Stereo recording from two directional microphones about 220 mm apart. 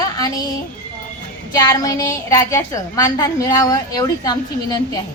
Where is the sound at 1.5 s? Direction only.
15° left (ahead or behind).